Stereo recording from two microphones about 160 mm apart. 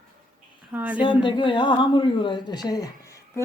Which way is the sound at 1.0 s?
30° left (ahead or behind).